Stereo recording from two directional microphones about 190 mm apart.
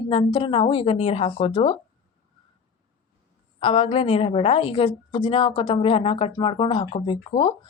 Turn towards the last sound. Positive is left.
turn(degrees=25)  # may be behind; listen again after turning